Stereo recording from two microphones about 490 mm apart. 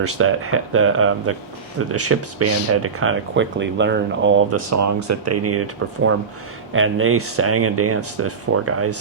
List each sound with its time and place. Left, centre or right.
0.0 s speech: right